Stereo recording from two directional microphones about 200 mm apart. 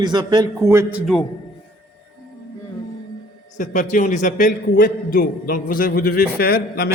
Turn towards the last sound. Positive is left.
turn(degrees=50)  # may be behind; listen again after turning